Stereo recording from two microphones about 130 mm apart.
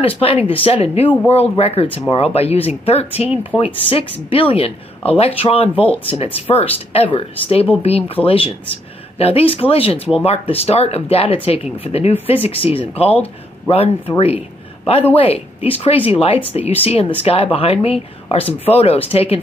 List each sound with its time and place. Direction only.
0.0 s speech: 45° left (ahead or behind)